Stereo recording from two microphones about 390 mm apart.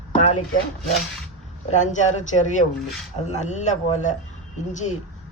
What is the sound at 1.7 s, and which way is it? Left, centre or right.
Speech, centre.